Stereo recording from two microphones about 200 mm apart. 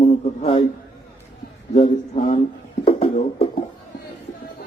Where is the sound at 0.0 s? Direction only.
30° left (ahead or behind).